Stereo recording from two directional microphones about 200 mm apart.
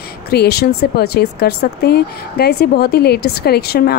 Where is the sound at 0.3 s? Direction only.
55° left (ahead or behind).